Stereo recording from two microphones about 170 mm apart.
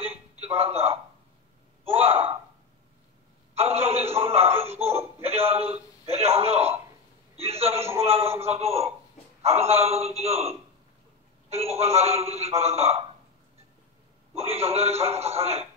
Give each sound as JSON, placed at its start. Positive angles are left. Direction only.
{"t": 0.0, "sound": "a sound", "side_deg": -35}
{"t": 1.9, "sound": "speech", "side_deg": -35}
{"t": 3.5, "sound": "a man's voice", "side_deg": -35}
{"t": 7.3, "sound": "a sound", "side_deg": -35}
{"t": 8.0, "sound": "a man's voice", "side_deg": -35}
{"t": 14.3, "sound": "a man's voice", "side_deg": -35}